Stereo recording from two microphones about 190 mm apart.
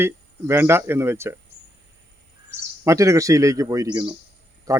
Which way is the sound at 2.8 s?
15° right (ahead or behind).